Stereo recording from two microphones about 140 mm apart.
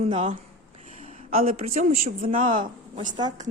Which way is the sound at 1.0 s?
50° right (ahead or behind).